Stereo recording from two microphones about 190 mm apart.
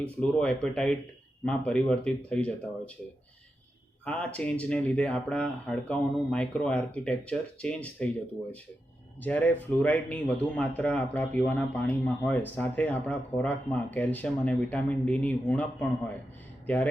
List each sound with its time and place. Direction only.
0.0 s speech: 5° left (ahead or behind)
4.0 s speech: 5° left (ahead or behind)
9.2 s speech: 10° left (ahead or behind)